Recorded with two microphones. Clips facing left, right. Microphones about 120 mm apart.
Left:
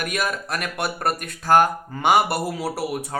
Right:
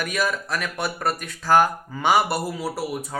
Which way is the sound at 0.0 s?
55° left (ahead or behind).